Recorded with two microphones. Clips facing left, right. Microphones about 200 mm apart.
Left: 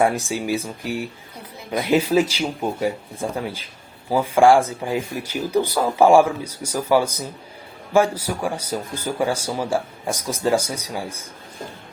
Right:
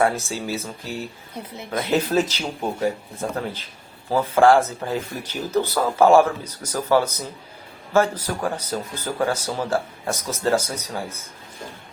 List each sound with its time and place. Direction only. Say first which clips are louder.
0.0 s speech: left 2 dB; 15° left (ahead or behind)